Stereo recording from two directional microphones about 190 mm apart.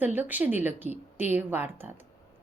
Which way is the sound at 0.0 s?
10° right (ahead or behind).